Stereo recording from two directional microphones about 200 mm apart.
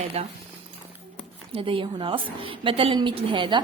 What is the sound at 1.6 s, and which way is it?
A woman's voice, 25° right (ahead or behind).